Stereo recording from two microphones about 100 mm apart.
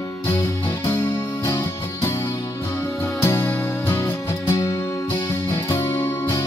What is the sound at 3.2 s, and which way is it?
Music, 25° left (ahead or behind).